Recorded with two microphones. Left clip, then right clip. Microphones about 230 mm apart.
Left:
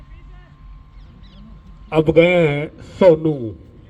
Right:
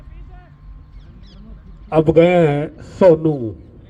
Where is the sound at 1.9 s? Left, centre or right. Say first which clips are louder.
Right 1 dB; left.